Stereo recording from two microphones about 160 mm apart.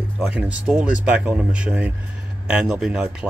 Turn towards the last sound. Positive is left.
turn(degrees=-5)  # may be behind; listen again after turning